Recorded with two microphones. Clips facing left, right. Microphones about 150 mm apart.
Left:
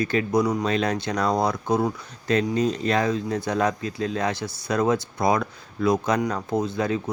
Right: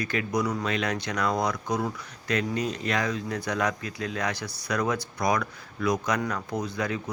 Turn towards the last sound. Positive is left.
turn(degrees=25)  # may be behind; listen again after turning